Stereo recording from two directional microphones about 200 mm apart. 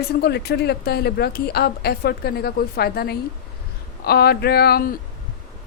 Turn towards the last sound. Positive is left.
turn(degrees=50)  # may be behind; listen again after turning